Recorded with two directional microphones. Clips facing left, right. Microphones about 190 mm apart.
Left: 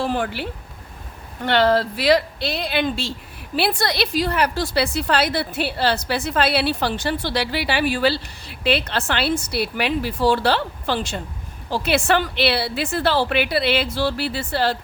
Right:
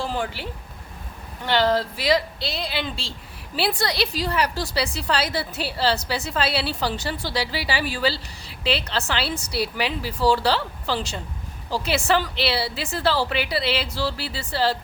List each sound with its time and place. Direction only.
0.0 s speech: 60° left (ahead or behind)
1.5 s a woman's voice: 60° left (ahead or behind)